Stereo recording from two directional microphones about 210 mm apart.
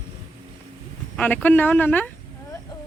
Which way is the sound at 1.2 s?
5° left (ahead or behind).